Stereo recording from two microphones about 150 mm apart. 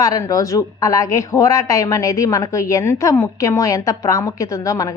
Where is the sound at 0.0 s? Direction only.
25° left (ahead or behind).